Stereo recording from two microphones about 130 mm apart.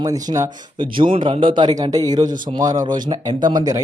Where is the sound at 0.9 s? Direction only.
40° right (ahead or behind).